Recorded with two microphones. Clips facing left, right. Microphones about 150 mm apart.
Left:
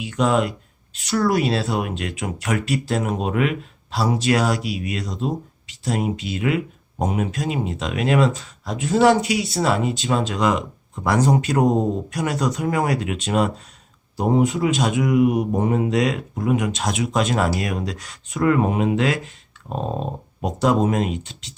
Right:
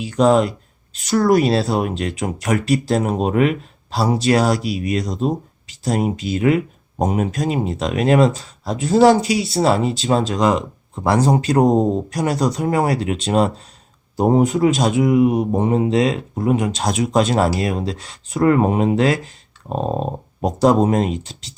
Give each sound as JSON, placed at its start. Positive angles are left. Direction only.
{"t": 0.0, "sound": "speech", "side_deg": -35}
{"t": 14.2, "sound": "speech", "side_deg": -45}